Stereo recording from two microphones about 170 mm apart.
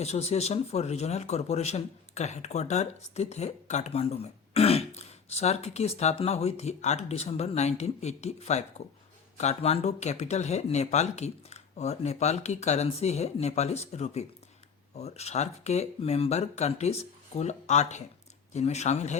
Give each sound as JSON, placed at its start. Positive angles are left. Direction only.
{"t": 0.0, "sound": "speech", "side_deg": 40}